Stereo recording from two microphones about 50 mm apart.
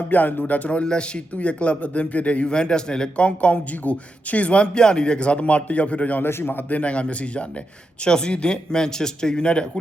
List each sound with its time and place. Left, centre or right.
0.1 s speech: left
6.2 s speech: left; by 9.6 s centre